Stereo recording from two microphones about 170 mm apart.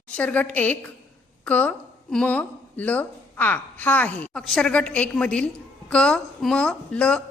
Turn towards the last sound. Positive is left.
turn(degrees=5)  # may be behind; listen again after turning